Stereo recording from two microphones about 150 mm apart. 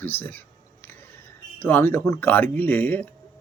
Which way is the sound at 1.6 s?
15° left (ahead or behind).